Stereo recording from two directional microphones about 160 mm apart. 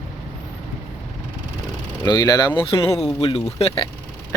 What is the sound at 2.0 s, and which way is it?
Speech, 25° left (ahead or behind).